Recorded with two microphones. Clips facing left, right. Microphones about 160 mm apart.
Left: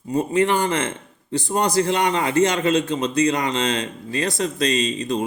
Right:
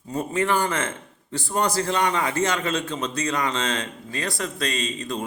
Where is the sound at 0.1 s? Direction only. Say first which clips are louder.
Left 4 dB; 20° left (ahead or behind).